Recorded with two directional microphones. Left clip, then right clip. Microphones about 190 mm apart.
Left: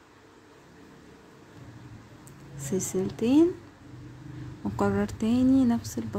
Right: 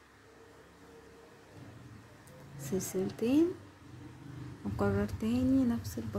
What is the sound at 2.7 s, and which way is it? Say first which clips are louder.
Speech: left 5 dB; 20° left (ahead or behind).